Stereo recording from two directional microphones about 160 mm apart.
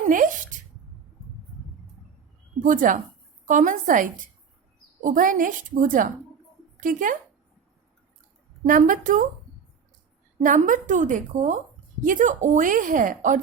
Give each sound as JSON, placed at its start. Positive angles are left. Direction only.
{"t": 0.0, "sound": "speech", "side_deg": -55}
{"t": 2.6, "sound": "a woman's voice", "side_deg": -55}
{"t": 8.6, "sound": "a woman's voice", "side_deg": -55}
{"t": 10.4, "sound": "a woman's voice", "side_deg": -55}